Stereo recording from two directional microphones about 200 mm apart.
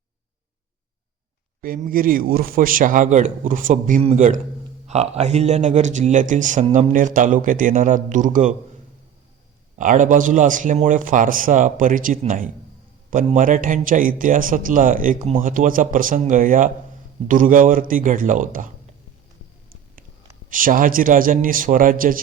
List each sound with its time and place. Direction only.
1.6 s speech: 45° right (ahead or behind)
9.7 s a man's voice: 40° right (ahead or behind)
20.5 s a man's voice: 45° right (ahead or behind)